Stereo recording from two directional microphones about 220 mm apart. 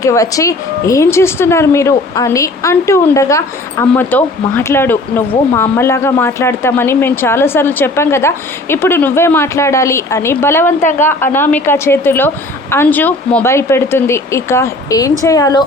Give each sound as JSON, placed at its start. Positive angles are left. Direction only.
{"t": 0.0, "sound": "a woman's voice", "side_deg": 15}